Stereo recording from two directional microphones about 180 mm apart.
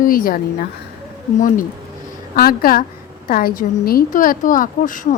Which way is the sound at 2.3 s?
55° left (ahead or behind).